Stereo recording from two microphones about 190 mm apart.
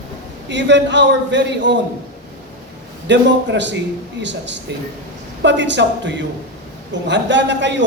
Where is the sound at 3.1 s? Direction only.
70° right (ahead or behind).